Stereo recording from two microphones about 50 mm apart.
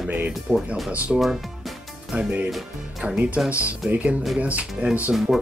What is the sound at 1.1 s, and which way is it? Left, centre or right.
Speech, centre.